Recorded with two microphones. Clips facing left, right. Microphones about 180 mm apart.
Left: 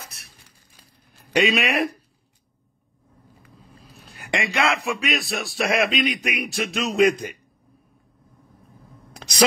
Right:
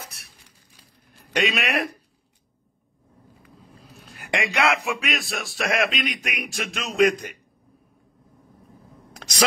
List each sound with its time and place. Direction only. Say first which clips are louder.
1.3 s a man's voice: left 3 dB; centre (ahead or behind)
4.3 s speech: even; 15° right (ahead or behind)
5.0 s a man's voice: left 3 dB; centre (ahead or behind)